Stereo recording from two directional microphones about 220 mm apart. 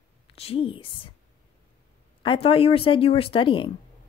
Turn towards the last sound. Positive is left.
turn(degrees=25)  # may be behind; listen again after turning